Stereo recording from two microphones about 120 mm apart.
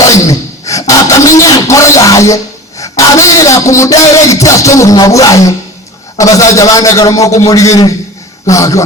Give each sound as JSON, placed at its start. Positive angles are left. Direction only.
{"t": 0.0, "sound": "a man's voice", "side_deg": 25}